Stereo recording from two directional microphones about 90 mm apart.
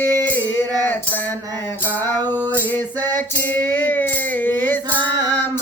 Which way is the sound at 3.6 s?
20° left (ahead or behind).